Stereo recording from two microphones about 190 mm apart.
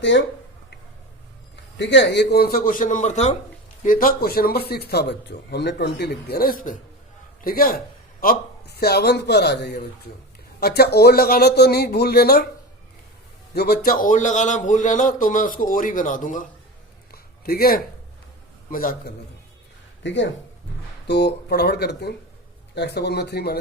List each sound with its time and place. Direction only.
0.0 s speech: 75° left (ahead or behind)
1.8 s a man's voice: 70° left (ahead or behind); by 3.3 s 40° left (ahead or behind)
3.8 s a man's voice: 50° left (ahead or behind)
13.5 s a man's voice: 55° left (ahead or behind)
17.1 s a sound: 55° left (ahead or behind)
18.7 s a man's voice: 45° left (ahead or behind)
20.0 s speech: 75° left (ahead or behind)
21.1 s a man's voice: 60° left (ahead or behind)